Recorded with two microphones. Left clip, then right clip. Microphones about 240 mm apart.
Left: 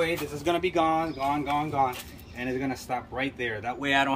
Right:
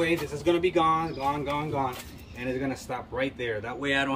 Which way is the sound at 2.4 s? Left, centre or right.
Centre.